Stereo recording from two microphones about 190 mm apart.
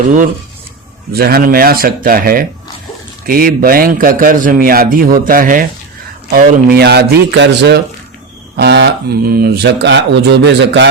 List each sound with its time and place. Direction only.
1.1 s a man's voice: 55° right (ahead or behind)